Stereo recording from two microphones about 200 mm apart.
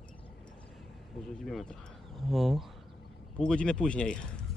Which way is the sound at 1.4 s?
Centre (ahead or behind).